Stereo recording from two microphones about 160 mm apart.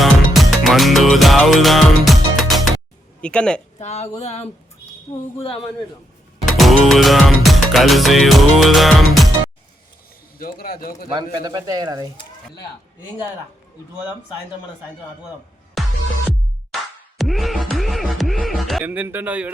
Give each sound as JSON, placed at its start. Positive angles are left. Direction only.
{"t": 0.0, "sound": "music", "side_deg": 0}
{"t": 3.2, "sound": "speech", "side_deg": 5}
{"t": 3.8, "sound": "a man's voice", "side_deg": 45}
{"t": 6.6, "sound": "music", "side_deg": 0}
{"t": 10.3, "sound": "speech", "side_deg": 70}
{"t": 11.1, "sound": "speech", "side_deg": -25}
{"t": 15.8, "sound": "music", "side_deg": 0}
{"t": 17.2, "sound": "music", "side_deg": 0}
{"t": 18.9, "sound": "speech", "side_deg": -10}